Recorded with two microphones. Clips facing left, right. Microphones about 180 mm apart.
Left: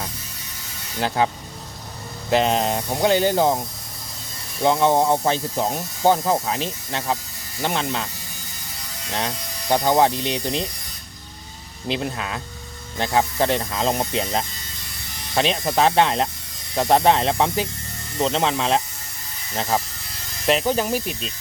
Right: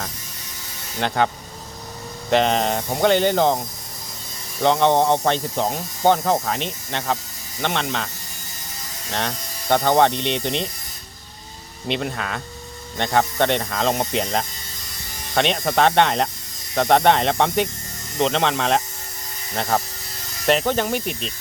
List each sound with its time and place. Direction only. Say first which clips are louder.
1.0 s speech: even; 5° left (ahead or behind)
2.3 s speech: right 1 dB; 5° left (ahead or behind)
4.6 s speech: right 1 dB; 5° left (ahead or behind)
9.1 s speech: even; 5° left (ahead or behind)
11.9 s speech: right 1 dB; 5° left (ahead or behind)